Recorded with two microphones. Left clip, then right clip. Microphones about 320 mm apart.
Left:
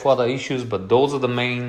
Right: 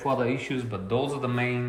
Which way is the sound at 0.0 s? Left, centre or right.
Centre.